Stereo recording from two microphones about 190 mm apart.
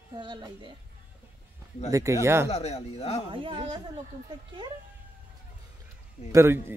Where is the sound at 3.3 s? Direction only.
25° right (ahead or behind).